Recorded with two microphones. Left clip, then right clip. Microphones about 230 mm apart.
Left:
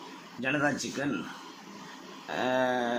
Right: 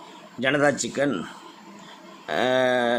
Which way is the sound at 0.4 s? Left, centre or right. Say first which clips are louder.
Right 8 dB; right.